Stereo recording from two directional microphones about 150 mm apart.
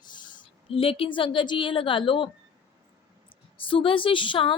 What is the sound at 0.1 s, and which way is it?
A woman's voice, 30° left (ahead or behind).